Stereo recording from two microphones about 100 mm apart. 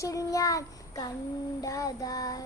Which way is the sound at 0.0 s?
30° left (ahead or behind).